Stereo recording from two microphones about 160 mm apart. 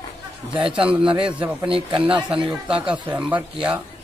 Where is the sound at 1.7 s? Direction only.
35° right (ahead or behind).